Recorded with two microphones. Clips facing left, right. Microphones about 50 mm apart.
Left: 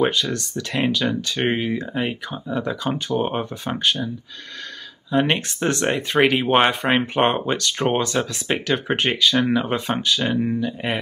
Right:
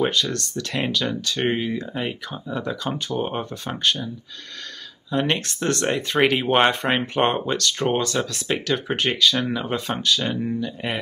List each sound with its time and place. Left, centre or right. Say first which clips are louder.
0.0 s speech: left 2 dB; centre
3.1 s speech: left 4 dB; centre
5.1 s speech: left 3 dB; centre